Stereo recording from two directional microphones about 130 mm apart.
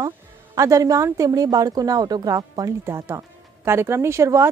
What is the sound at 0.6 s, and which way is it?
A woman's voice, 25° right (ahead or behind).